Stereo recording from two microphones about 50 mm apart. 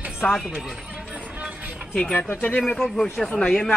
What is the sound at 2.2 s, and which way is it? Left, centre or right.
Speech, left.